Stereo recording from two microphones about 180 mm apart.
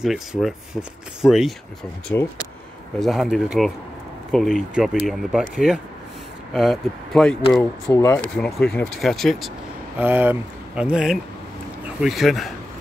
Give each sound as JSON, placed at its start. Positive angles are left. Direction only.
{"t": 0.0, "sound": "speech", "side_deg": 0}
{"t": 2.1, "sound": "speech", "side_deg": 15}
{"t": 3.0, "sound": "speech", "side_deg": 0}
{"t": 7.9, "sound": "speech", "side_deg": 15}
{"t": 8.2, "sound": "speech", "side_deg": 5}
{"t": 9.9, "sound": "speech", "side_deg": -10}